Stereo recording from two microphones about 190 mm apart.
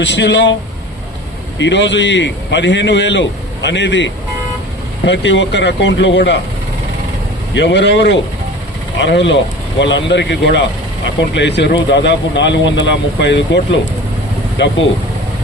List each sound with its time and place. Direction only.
0.0 s speech: 65° left (ahead or behind)
1.5 s a man's voice: 70° left (ahead or behind)
7.5 s a man's voice: 65° left (ahead or behind)